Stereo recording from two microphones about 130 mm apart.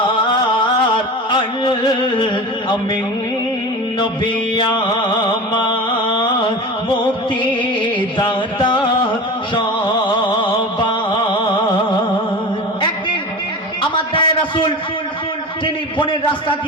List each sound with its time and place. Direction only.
0.1 s music: 40° left (ahead or behind)
4.0 s music: 35° left (ahead or behind)
7.8 s music: 40° left (ahead or behind)
9.6 s a sound: 35° left (ahead or behind)
10.8 s music: 35° left (ahead or behind)
13.9 s a sound: 40° left (ahead or behind)